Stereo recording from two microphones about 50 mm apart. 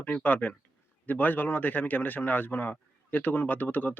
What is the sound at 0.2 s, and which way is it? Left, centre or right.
Speech, left.